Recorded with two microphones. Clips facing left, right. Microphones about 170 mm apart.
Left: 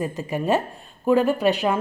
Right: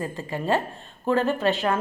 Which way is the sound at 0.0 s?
15° left (ahead or behind).